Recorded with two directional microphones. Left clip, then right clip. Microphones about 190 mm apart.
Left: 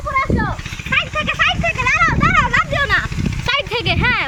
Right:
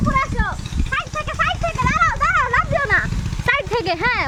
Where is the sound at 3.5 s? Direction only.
30° right (ahead or behind).